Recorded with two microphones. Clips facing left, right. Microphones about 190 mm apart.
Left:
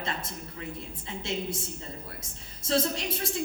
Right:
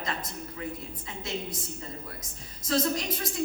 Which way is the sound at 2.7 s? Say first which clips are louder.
Even; 30° left (ahead or behind).